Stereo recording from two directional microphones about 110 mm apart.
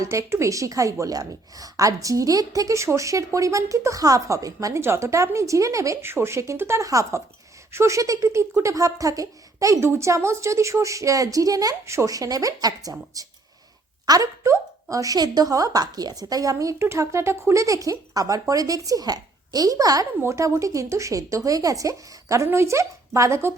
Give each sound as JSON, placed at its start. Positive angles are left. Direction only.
{"t": 0.0, "sound": "a woman's voice", "side_deg": -25}